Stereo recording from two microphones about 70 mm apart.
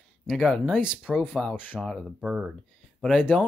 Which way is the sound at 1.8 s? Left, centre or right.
Centre.